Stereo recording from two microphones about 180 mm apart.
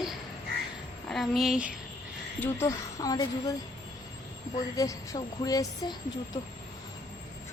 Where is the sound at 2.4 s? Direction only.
15° left (ahead or behind).